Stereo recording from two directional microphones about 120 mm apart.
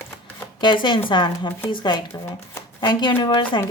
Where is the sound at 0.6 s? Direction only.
40° left (ahead or behind).